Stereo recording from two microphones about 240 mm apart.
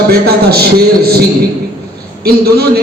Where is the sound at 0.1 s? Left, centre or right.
Right.